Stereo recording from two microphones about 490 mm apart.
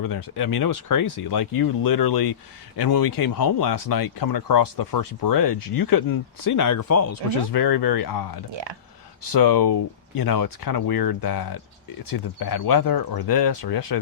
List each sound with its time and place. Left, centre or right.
0.0 s speech: left
9.3 s speech: left